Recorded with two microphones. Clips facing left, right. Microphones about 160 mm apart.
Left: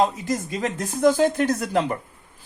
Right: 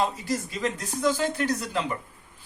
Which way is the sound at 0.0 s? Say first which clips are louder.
Left 5 dB; 50° left (ahead or behind).